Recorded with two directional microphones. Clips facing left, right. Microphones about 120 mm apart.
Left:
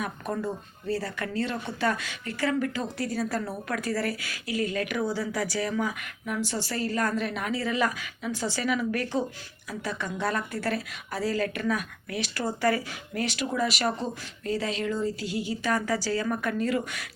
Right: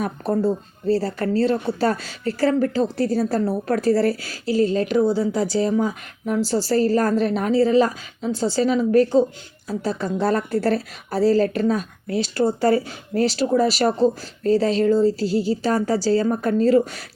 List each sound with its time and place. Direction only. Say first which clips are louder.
0.0 s speech: right 9 dB; 30° right (ahead or behind)